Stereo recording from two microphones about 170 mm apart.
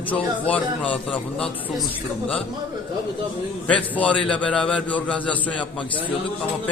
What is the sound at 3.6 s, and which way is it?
A man's voice, 10° left (ahead or behind).